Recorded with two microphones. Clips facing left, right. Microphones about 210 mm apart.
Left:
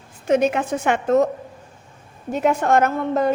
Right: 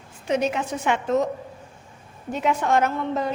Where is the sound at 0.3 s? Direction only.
50° left (ahead or behind).